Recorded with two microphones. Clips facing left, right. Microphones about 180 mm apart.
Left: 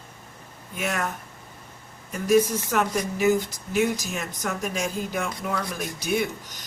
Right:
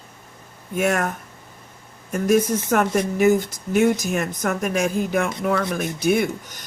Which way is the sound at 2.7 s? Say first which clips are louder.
Right 6 dB; 55° right (ahead or behind).